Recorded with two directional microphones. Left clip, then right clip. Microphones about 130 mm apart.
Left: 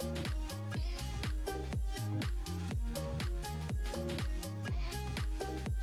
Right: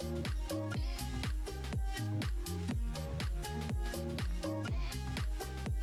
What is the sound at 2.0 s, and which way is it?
Music, centre (ahead or behind).